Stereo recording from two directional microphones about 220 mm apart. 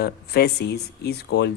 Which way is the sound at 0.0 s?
45° left (ahead or behind).